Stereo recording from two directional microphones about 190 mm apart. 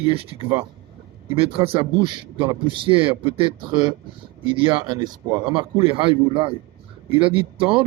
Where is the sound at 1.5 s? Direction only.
30° right (ahead or behind).